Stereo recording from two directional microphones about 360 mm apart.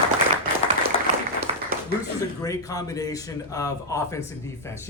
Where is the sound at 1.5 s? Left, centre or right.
Centre.